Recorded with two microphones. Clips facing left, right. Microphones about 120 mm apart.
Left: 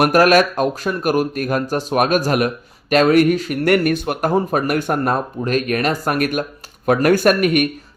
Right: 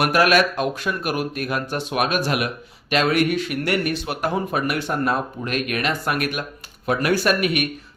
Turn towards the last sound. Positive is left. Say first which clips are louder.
# left 6 dB
turn(degrees=45)  # may be behind; listen again after turning